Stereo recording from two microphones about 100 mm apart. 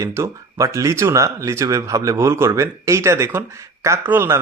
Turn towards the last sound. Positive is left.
turn(degrees=-25)  # may be behind; listen again after turning